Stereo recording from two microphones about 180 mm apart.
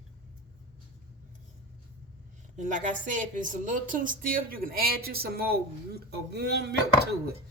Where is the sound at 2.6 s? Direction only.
45° right (ahead or behind); by 6.9 s 65° right (ahead or behind).